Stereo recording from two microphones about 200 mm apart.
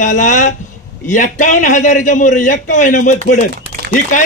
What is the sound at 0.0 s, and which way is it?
A man's voice, 40° left (ahead or behind).